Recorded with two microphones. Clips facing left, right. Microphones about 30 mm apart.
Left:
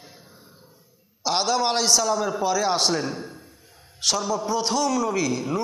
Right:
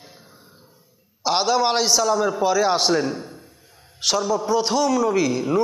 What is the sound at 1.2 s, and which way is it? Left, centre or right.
A man's voice, centre.